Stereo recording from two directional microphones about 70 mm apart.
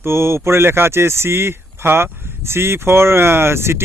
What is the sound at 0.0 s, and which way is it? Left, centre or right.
Speech, right.